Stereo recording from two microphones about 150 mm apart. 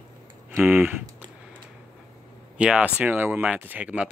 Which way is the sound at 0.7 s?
10° right (ahead or behind).